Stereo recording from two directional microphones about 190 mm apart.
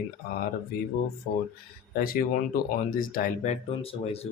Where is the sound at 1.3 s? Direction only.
45° left (ahead or behind).